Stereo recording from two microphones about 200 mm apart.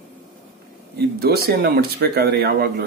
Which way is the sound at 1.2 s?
50° right (ahead or behind).